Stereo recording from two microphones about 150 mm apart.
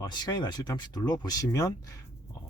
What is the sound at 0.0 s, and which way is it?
Speech, 25° left (ahead or behind).